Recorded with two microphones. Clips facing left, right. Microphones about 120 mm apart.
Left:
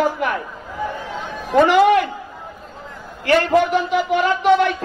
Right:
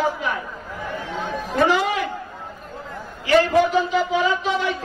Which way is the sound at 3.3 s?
65° left (ahead or behind).